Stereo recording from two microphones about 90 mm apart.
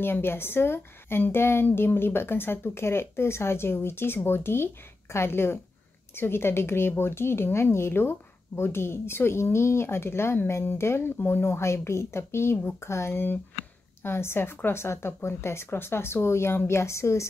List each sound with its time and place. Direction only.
0.0 s speech: 25° left (ahead or behind)